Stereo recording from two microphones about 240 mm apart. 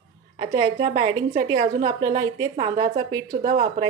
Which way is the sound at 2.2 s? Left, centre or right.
Centre.